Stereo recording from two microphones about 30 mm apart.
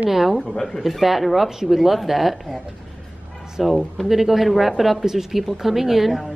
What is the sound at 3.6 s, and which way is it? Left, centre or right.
A woman's voice, centre.